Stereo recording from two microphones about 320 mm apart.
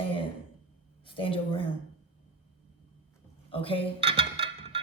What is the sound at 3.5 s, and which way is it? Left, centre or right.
Speech, centre.